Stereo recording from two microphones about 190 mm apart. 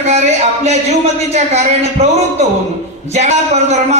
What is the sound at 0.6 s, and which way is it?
Speech, 35° right (ahead or behind).